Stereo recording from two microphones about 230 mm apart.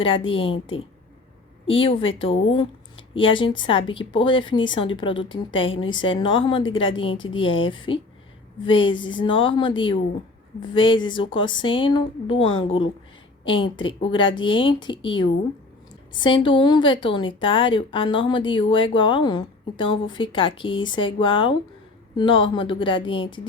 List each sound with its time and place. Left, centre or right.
0.3 s a woman's voice: left
1.6 s a woman's voice: left